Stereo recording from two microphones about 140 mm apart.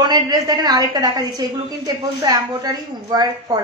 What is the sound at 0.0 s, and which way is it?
A woman's voice, 30° right (ahead or behind).